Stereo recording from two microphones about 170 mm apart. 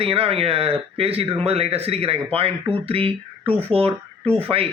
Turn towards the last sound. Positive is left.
turn(degrees=-35)  # may be behind; listen again after turning